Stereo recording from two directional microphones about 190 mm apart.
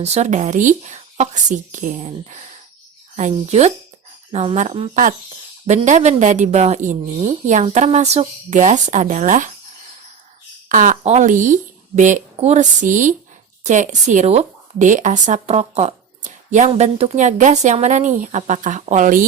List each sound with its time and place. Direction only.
0.0 s speech: 35° right (ahead or behind)
10.7 s speech: 45° right (ahead or behind)